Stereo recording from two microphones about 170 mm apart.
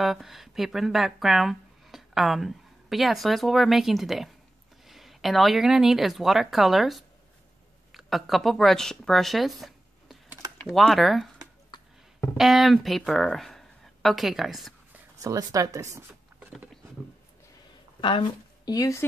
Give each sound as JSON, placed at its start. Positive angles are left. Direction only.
{"t": 0.0, "sound": "speech", "side_deg": 0}
{"t": 11.7, "sound": "a sound", "side_deg": 25}
{"t": 12.4, "sound": "speech", "side_deg": 0}
{"t": 15.2, "sound": "speech", "side_deg": -20}
{"t": 18.7, "sound": "speech", "side_deg": 20}